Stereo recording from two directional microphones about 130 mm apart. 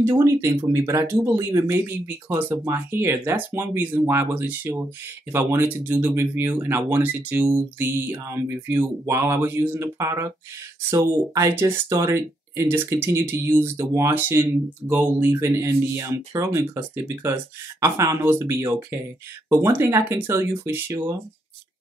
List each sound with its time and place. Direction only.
0.0 s speech: 20° right (ahead or behind)